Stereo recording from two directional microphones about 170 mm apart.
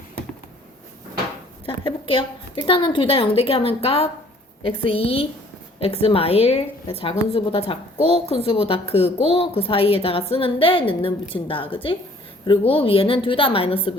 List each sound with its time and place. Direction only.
1.6 s a woman's voice: 30° left (ahead or behind)